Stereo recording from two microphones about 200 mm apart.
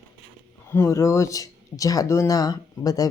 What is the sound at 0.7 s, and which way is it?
Speech, 15° left (ahead or behind).